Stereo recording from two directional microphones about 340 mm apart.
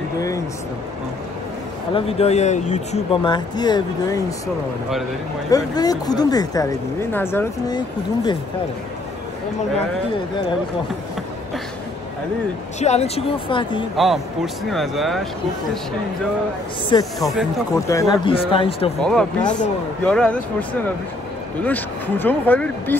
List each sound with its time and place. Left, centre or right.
2.0 s speech: centre
5.5 s speech: centre
12.8 s speech: centre
13.9 s speech: centre
17.2 s speech: centre
18.9 s speech: centre
21.6 s speech: centre